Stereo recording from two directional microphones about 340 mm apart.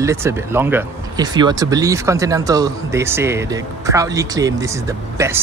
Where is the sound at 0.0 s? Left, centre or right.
Centre.